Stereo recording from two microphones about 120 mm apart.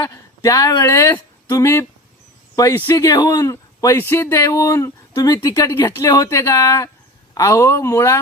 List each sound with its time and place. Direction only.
0.0 s speech: 25° left (ahead or behind)